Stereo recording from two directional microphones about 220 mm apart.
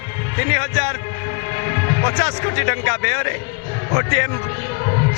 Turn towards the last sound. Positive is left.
turn(degrees=15)  # may be behind; listen again after turning